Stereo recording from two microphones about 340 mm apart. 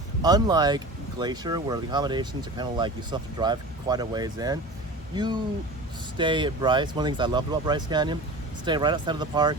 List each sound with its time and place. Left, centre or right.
0.2 s speech: centre